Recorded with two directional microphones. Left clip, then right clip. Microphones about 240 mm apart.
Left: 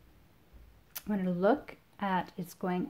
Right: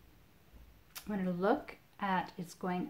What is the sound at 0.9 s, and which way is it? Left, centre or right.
Speech, left.